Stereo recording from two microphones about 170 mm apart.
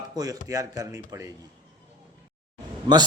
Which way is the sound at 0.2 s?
20° right (ahead or behind).